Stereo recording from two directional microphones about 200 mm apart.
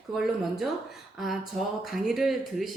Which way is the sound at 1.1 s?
Centre (ahead or behind).